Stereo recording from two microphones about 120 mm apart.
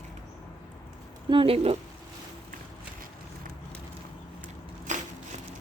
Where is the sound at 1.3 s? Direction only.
50° right (ahead or behind).